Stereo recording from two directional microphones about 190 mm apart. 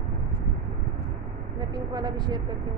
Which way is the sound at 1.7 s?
20° right (ahead or behind).